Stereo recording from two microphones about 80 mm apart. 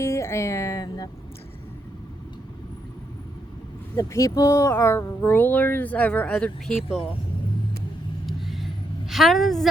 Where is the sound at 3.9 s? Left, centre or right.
Left.